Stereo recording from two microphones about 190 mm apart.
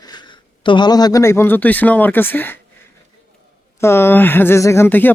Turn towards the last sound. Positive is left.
turn(degrees=10)  # may be behind; listen again after turning